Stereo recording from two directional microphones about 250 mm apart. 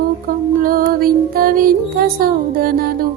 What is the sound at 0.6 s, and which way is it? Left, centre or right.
Music, right.